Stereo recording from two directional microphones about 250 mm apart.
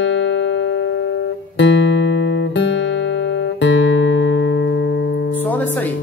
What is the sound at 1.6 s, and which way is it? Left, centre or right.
Music, left.